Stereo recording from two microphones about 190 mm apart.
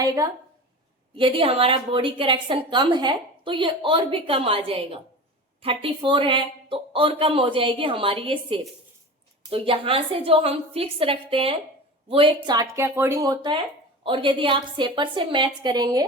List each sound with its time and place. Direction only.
1.1 s a woman's voice: 25° right (ahead or behind)